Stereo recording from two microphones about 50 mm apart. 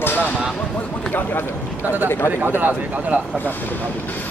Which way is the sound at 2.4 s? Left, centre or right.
Right.